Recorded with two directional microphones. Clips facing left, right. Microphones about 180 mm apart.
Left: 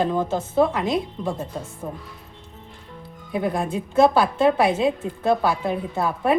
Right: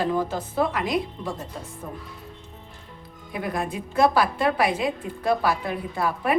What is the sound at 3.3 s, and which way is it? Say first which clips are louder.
A woman's voice: left 5 dB; 30° left (ahead or behind).